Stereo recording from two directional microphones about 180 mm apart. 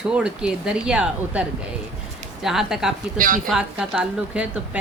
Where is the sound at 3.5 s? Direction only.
5° right (ahead or behind).